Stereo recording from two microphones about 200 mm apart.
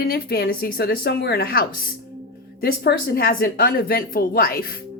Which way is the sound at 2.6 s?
50° left (ahead or behind).